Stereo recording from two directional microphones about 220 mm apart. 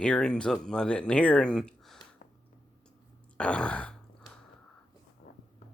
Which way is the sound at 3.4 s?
5° left (ahead or behind).